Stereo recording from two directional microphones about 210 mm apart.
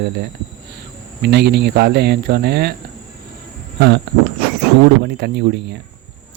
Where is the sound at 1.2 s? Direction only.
50° right (ahead or behind).